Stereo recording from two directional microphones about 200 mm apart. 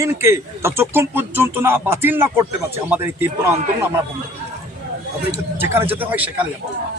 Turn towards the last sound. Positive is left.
turn(degrees=-10)  # may be behind; listen again after turning